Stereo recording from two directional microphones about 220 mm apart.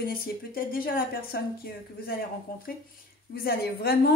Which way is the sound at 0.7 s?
40° left (ahead or behind).